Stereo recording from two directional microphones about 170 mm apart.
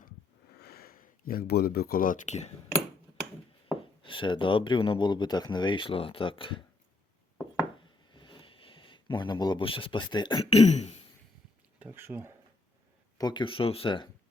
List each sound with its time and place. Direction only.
0.6 s speech: 65° left (ahead or behind); by 2.5 s 40° left (ahead or behind)
3.7 s speech: 30° left (ahead or behind)
8.1 s a sound: 30° left (ahead or behind)
10.5 s throat clearing: 40° left (ahead or behind)
11.8 s speech: 15° right (ahead or behind)
13.1 s speech: 25° left (ahead or behind)